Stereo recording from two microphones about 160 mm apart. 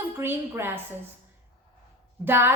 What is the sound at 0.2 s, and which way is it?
Speech, 15° right (ahead or behind).